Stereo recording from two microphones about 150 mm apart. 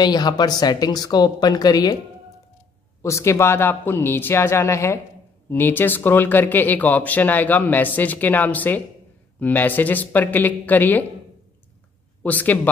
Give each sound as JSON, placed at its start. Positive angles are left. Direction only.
{"t": 0.0, "sound": "speech", "side_deg": 25}
{"t": 3.0, "sound": "speech", "side_deg": 20}
{"t": 12.2, "sound": "a man's voice", "side_deg": 10}